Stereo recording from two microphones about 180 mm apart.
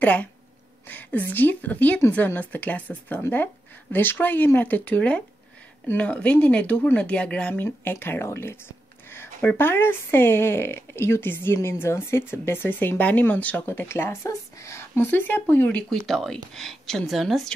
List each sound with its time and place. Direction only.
0.0 s a woman's voice: 10° left (ahead or behind)